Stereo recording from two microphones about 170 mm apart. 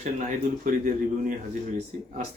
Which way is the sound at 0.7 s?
55° right (ahead or behind).